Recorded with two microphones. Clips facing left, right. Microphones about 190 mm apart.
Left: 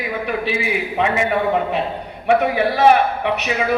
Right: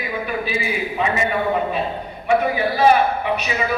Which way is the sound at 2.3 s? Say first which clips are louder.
Left 2 dB; 70° left (ahead or behind).